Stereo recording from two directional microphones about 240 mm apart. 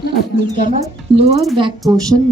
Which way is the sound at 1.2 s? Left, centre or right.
Right.